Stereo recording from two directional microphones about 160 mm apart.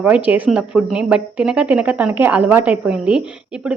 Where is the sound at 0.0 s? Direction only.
10° right (ahead or behind).